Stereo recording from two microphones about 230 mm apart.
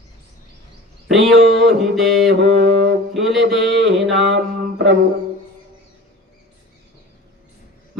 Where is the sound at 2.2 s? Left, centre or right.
Right.